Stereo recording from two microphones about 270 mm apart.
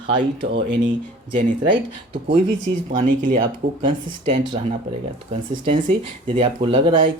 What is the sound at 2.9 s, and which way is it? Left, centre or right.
Speech, right.